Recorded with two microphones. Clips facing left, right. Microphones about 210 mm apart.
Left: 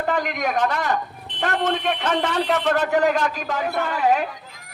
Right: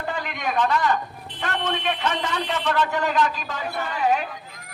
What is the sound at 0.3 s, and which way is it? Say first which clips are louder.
Speech: left 1 dB; 45° left (ahead or behind).